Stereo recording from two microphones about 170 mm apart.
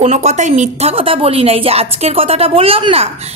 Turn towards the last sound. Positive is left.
turn(degrees=-35)  # may be behind; listen again after turning